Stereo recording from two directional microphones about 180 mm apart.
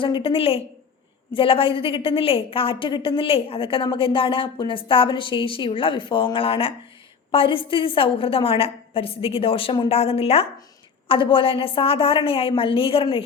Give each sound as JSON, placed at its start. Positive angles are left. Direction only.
{"t": 0.0, "sound": "a woman's voice", "side_deg": 30}